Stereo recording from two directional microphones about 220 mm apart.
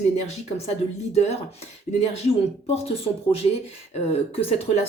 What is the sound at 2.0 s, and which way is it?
Music, 30° left (ahead or behind).